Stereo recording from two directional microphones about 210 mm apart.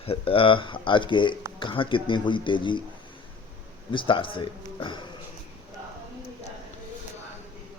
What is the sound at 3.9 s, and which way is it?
Speech, 25° left (ahead or behind).